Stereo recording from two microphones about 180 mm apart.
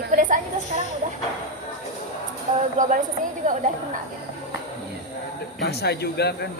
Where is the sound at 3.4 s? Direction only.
45° right (ahead or behind).